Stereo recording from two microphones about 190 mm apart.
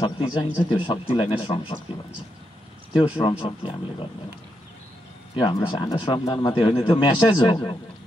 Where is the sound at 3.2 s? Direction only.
25° left (ahead or behind).